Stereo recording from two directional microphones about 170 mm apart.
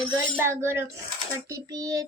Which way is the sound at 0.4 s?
15° right (ahead or behind).